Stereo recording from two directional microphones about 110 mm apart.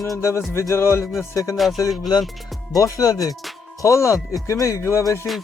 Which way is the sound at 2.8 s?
30° left (ahead or behind).